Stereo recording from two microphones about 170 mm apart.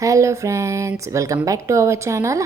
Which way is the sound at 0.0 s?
20° right (ahead or behind).